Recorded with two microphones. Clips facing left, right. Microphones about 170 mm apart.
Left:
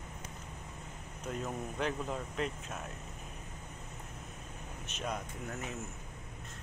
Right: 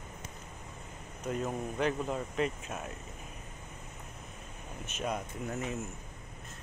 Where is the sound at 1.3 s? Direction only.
Centre (ahead or behind).